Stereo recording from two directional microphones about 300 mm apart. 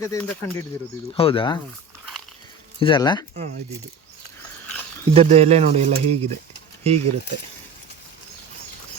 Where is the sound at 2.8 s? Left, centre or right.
Centre.